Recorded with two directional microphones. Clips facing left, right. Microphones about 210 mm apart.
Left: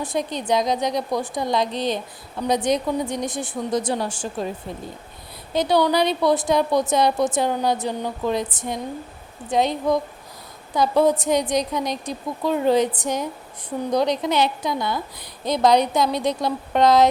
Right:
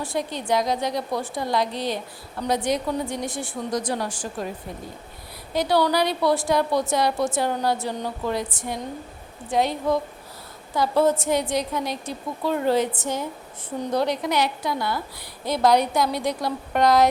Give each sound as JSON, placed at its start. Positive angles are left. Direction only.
{"t": 0.0, "sound": "a woman's voice", "side_deg": 20}
{"t": 5.5, "sound": "a woman's voice", "side_deg": 20}